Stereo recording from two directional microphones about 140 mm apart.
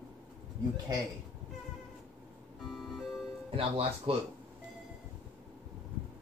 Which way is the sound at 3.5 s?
40° right (ahead or behind).